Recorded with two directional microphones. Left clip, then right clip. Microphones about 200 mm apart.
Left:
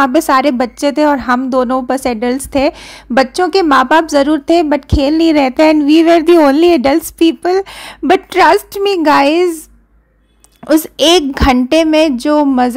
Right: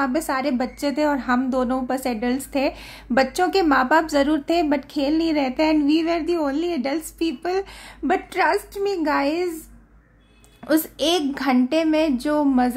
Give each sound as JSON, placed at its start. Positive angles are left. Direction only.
{"t": 0.0, "sound": "a woman's voice", "side_deg": 40}
{"t": 10.7, "sound": "a woman's voice", "side_deg": 40}